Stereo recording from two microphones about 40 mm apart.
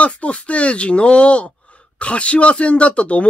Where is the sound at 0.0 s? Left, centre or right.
Left.